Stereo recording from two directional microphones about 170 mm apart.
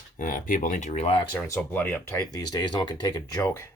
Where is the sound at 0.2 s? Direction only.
50° left (ahead or behind); by 1.4 s 30° left (ahead or behind).